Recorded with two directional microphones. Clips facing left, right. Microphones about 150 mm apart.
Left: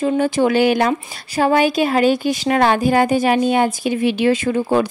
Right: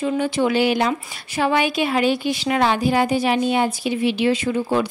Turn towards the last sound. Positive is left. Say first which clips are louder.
# left 3 dB
turn(degrees=50)  # may be behind; listen again after turning